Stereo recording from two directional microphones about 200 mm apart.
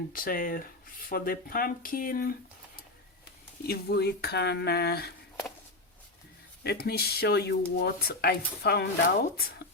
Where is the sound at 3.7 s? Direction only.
55° left (ahead or behind).